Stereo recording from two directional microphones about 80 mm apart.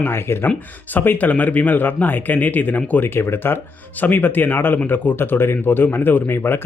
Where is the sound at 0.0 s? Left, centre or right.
Left.